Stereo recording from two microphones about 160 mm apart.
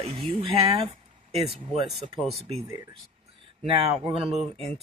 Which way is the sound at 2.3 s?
40° right (ahead or behind).